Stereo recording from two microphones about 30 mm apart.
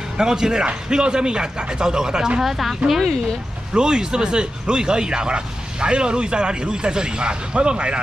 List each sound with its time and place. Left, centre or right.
0.2 s speech: right
2.4 s speech: centre
3.7 s speech: right